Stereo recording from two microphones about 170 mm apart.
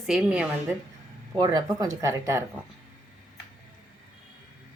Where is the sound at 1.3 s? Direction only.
25° right (ahead or behind).